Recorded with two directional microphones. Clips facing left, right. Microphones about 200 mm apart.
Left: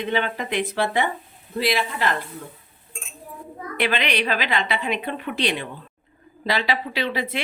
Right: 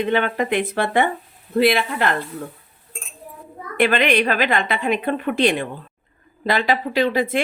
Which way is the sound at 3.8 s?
50° right (ahead or behind).